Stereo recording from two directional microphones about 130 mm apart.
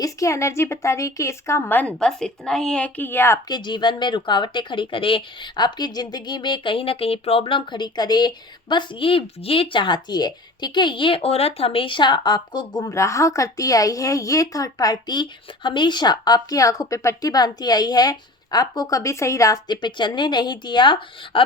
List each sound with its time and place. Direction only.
0.0 s a woman's voice: 25° left (ahead or behind)
2.0 s a woman's voice: 5° left (ahead or behind)
3.5 s speech: 35° left (ahead or behind)